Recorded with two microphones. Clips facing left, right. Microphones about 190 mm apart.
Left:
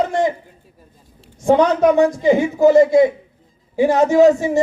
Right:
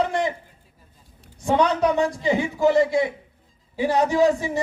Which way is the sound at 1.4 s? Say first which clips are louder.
Left 6 dB; 45° left (ahead or behind).